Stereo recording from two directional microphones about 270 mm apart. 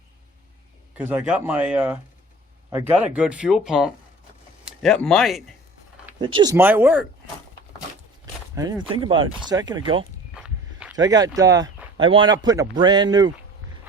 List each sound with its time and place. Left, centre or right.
0.9 s speech: centre
6.1 s a man's voice: centre
8.5 s a man's voice: centre
10.3 s a sound: centre
11.3 s a man's voice: centre